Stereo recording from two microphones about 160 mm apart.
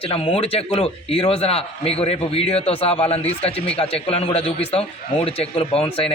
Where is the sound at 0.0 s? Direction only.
35° left (ahead or behind).